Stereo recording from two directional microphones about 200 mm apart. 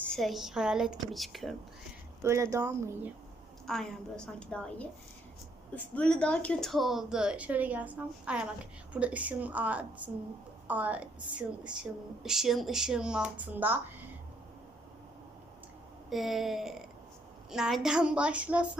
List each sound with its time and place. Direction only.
0.1 s speech: centre (ahead or behind)
2.2 s a woman's voice: 15° right (ahead or behind)
3.7 s a woman's voice: 5° left (ahead or behind)
16.0 s speech: centre (ahead or behind)